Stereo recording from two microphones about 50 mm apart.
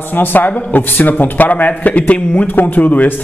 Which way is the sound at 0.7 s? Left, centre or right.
Left.